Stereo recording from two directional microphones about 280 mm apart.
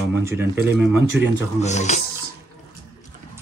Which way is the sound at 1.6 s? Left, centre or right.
Left.